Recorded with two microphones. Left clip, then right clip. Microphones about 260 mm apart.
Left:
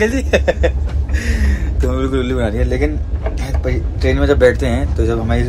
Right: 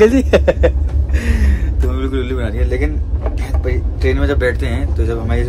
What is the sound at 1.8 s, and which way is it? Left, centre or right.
A man's voice, centre.